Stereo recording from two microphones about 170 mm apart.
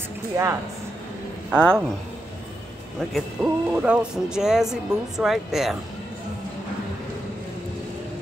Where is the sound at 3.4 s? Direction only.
10° right (ahead or behind).